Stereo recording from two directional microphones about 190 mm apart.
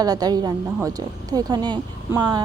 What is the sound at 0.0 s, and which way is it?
A woman's voice, 20° right (ahead or behind).